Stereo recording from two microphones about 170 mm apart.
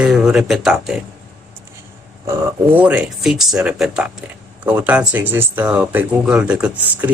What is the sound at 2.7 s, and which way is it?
Speech, 10° right (ahead or behind).